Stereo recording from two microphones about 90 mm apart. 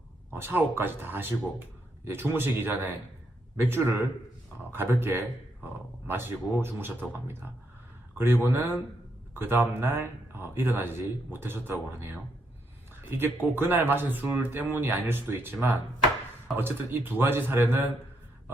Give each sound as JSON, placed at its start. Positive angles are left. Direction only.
{"t": 0.3, "sound": "speech", "side_deg": -25}
{"t": 16.6, "sound": "speech", "side_deg": -25}